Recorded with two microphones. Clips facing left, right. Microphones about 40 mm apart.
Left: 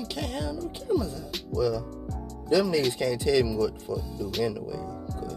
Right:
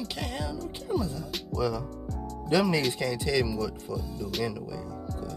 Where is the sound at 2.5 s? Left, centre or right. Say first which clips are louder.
Left 2 dB; right.